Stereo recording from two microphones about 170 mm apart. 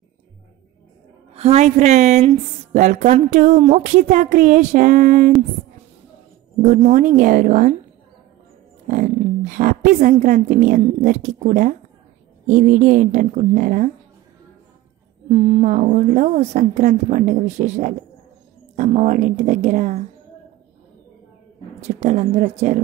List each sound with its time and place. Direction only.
1.3 s a woman's voice: 40° right (ahead or behind)
6.6 s a woman's voice: 45° right (ahead or behind)
8.8 s a woman's voice: 50° right (ahead or behind)
15.2 s a woman's voice: 40° right (ahead or behind)
21.8 s a woman's voice: 40° right (ahead or behind)